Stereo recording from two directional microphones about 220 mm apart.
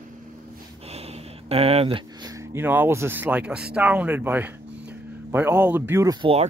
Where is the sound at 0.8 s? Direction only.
30° right (ahead or behind).